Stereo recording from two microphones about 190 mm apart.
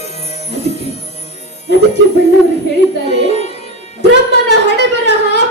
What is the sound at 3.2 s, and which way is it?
Music, 35° left (ahead or behind).